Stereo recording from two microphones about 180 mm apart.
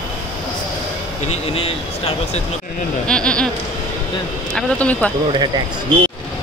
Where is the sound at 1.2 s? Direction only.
35° left (ahead or behind).